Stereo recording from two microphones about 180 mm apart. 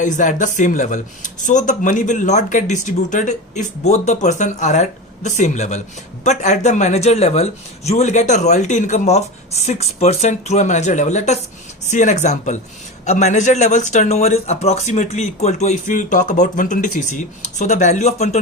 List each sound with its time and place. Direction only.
0.0 s speech: 45° left (ahead or behind)